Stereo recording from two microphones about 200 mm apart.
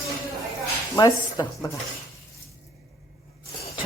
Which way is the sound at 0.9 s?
20° left (ahead or behind).